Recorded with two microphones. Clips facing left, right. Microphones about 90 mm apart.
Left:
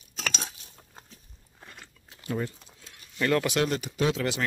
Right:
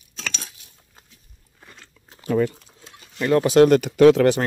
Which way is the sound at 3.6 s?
65° right (ahead or behind).